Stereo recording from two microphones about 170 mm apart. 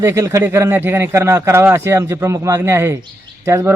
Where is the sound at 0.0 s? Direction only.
15° right (ahead or behind).